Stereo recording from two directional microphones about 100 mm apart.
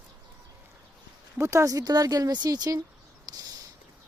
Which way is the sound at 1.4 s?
30° right (ahead or behind).